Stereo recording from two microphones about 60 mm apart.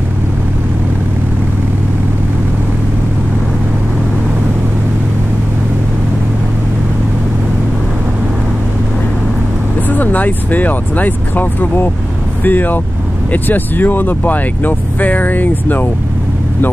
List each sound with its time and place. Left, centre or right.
9.8 s speech: left